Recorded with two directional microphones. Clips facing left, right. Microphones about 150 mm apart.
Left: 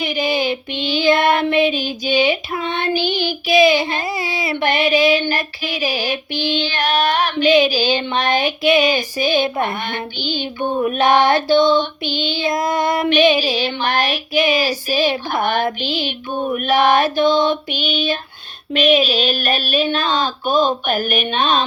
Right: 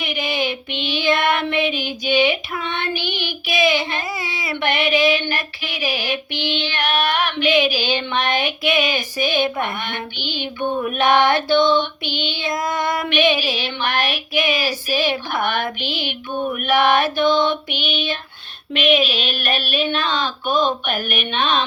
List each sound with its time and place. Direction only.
0.0 s child singing: 35° left (ahead or behind)
4.4 s female singing: 30° left (ahead or behind)
13.1 s female singing: 40° left (ahead or behind)